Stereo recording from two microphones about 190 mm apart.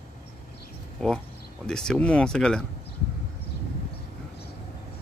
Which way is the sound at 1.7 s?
5° left (ahead or behind).